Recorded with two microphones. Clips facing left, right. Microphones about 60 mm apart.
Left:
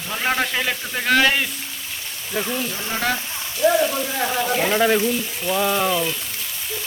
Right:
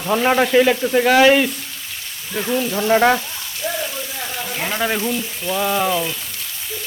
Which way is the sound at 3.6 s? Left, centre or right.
Centre.